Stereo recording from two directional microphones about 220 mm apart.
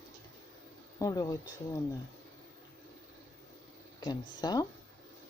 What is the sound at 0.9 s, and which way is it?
Speech, 15° left (ahead or behind).